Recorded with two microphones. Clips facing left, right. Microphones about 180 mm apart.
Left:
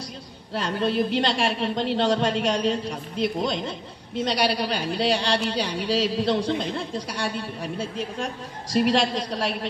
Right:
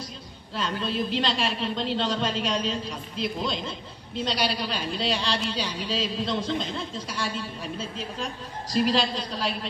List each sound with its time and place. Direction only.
0.6 s a man's voice: 70° left (ahead or behind)
4.3 s a man's voice: 65° left (ahead or behind)